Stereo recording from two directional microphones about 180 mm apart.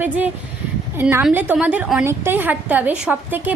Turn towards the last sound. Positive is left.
turn(degrees=-10)  # may be behind; listen again after turning